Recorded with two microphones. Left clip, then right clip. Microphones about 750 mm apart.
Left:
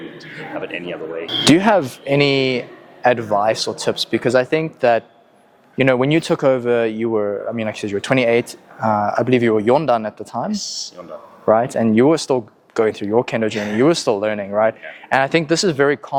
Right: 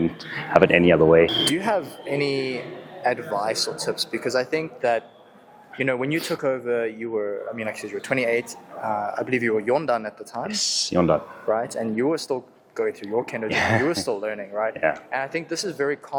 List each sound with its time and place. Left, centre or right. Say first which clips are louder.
0.6 s speech: right 13 dB; right
1.5 s speech: left 9 dB; left
10.5 s speech: right 4 dB; right
11.4 s speech: left 13 dB; left